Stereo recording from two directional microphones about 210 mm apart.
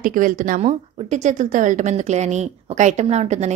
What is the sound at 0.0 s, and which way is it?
A woman's voice, 40° right (ahead or behind).